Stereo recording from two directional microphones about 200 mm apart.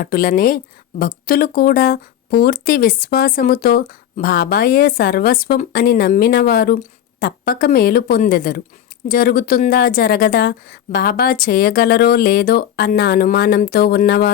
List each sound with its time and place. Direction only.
0.0 s a woman's voice: 45° left (ahead or behind)